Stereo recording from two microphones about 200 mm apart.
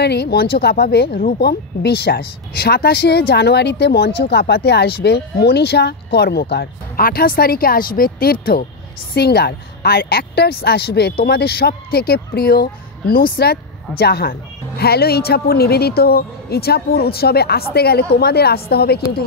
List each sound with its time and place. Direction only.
0.0 s speech: 55° left (ahead or behind)